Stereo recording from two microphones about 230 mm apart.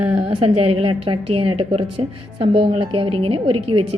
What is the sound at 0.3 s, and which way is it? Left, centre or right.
A woman's voice, right.